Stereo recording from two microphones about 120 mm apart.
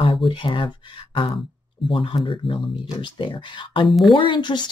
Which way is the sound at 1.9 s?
45° left (ahead or behind).